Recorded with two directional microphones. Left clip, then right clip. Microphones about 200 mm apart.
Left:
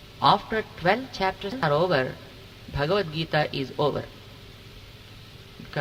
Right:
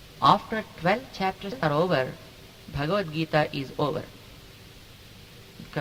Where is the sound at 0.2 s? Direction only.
10° right (ahead or behind).